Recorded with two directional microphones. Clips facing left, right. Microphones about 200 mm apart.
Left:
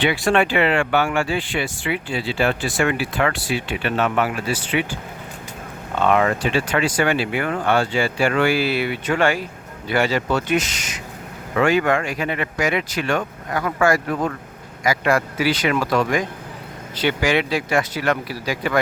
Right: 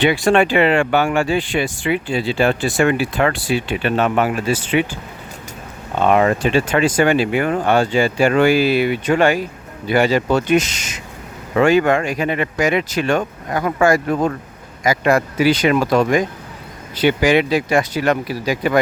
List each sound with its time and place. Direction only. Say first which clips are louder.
0.3 s speech: right 3 dB; 20° right (ahead or behind)
4.4 s speech: right 5 dB; 45° right (ahead or behind)
6.0 s speech: right 3 dB; 25° right (ahead or behind)